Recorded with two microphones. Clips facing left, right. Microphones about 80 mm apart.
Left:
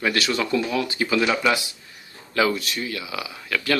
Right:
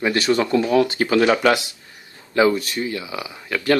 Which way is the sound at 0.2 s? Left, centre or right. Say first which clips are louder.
Right 5 dB; right.